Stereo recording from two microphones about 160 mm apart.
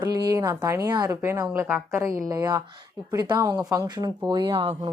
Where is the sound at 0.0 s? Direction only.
20° right (ahead or behind).